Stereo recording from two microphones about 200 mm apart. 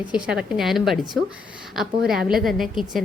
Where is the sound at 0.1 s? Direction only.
5° right (ahead or behind).